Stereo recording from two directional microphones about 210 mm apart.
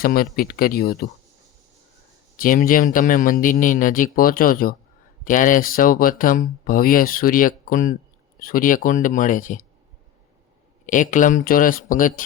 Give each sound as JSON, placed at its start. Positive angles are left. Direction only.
{"t": 0.0, "sound": "speech", "side_deg": 45}
{"t": 2.4, "sound": "speech", "side_deg": 40}
{"t": 10.8, "sound": "speech", "side_deg": 40}